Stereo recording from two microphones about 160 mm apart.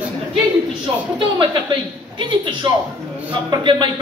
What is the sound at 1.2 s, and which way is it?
Speech, 30° right (ahead or behind).